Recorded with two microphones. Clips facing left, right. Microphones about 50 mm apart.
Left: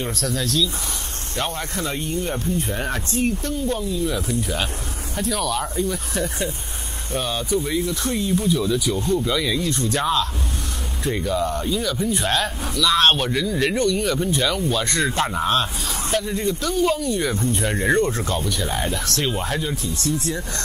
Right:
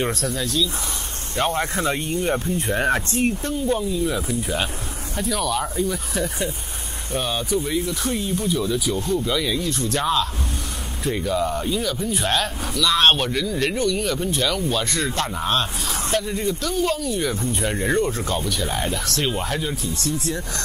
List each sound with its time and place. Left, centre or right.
0.3 s speech: centre
1.5 s speech: right
3.6 s speech: centre
15.1 s a man's voice: centre
16.1 s speech: centre